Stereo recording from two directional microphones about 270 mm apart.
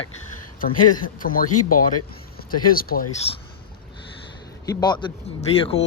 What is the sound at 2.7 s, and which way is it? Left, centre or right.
Speech, left.